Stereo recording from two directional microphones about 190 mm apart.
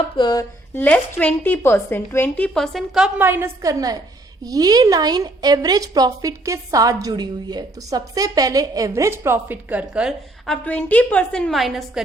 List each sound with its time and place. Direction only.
0.2 s a woman's voice: 20° left (ahead or behind); by 12.0 s centre (ahead or behind)